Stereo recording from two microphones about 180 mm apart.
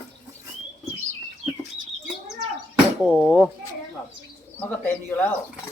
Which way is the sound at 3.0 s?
5° right (ahead or behind).